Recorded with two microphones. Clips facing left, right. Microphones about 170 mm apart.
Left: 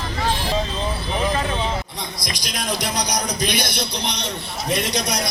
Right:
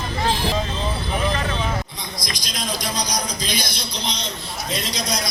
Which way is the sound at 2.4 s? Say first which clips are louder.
Left 3 dB; 65° left (ahead or behind).